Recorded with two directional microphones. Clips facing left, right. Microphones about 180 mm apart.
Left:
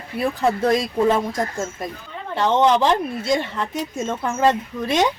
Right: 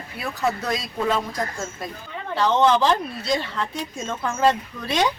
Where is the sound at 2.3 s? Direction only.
20° left (ahead or behind).